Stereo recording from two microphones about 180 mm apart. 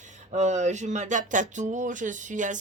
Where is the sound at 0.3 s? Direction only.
40° right (ahead or behind).